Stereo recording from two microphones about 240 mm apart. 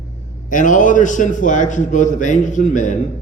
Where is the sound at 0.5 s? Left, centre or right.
Left.